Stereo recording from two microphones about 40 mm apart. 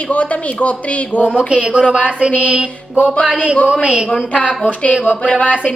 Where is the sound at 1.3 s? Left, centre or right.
Right.